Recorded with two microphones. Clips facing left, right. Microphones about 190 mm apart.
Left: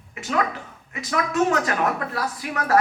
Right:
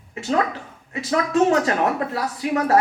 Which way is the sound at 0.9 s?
30° right (ahead or behind).